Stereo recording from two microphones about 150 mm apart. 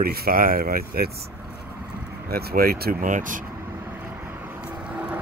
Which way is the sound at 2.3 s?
90° right.